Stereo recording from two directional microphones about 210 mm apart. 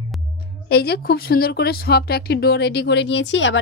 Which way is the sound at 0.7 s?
50° left (ahead or behind).